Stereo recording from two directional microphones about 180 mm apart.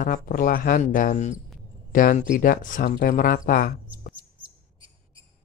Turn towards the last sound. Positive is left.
turn(degrees=50)  # may be behind; listen again after turning